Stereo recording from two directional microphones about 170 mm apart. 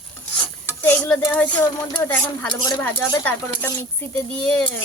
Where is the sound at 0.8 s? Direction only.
15° left (ahead or behind).